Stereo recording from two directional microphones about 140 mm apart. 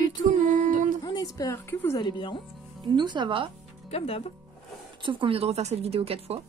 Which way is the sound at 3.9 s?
45° left (ahead or behind).